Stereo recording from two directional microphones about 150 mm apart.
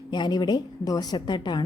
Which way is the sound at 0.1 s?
30° left (ahead or behind).